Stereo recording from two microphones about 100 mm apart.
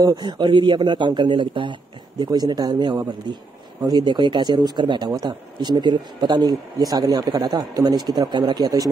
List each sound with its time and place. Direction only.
0.0 s a man's voice: 40° right (ahead or behind)